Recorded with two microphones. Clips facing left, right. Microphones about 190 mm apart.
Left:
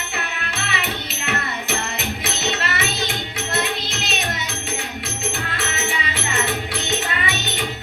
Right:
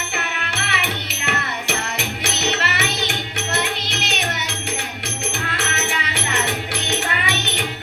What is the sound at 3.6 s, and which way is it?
Music, 75° right (ahead or behind).